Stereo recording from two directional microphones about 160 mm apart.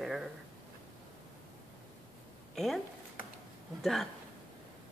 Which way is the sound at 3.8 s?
Centre (ahead or behind).